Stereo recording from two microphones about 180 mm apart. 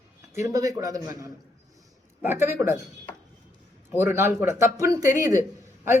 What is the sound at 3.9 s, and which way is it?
Speech, 15° right (ahead or behind).